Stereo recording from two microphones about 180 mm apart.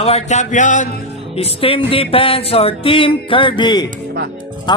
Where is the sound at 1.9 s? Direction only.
30° left (ahead or behind).